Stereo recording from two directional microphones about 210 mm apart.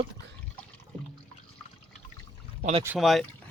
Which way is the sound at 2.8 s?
Centre (ahead or behind).